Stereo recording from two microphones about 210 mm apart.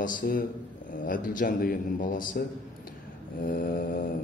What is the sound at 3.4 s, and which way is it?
Mantra, 45° left (ahead or behind).